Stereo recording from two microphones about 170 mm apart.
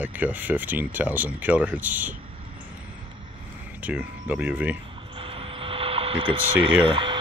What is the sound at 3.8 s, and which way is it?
Speech, 10° right (ahead or behind).